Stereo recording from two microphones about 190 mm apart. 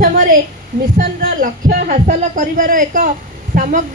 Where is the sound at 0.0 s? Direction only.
45° right (ahead or behind).